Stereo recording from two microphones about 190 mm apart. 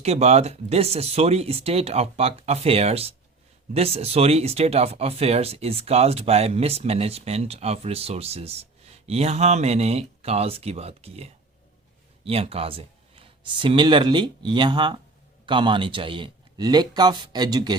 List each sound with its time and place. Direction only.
0.0 s speech: 35° right (ahead or behind)